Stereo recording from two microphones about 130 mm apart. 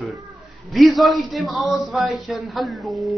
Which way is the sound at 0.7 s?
Centre (ahead or behind).